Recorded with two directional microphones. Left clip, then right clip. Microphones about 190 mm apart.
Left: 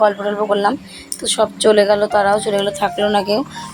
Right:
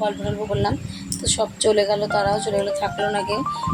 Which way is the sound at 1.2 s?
20° left (ahead or behind).